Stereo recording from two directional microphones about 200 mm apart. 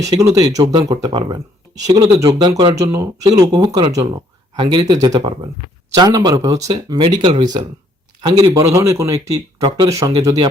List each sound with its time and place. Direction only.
0.0 s speech: 15° right (ahead or behind)